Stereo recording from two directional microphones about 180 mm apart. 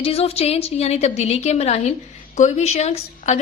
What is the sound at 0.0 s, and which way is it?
A woman's voice, 35° left (ahead or behind).